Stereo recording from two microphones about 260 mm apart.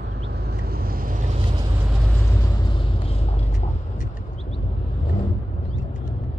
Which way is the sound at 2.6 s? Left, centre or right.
Centre.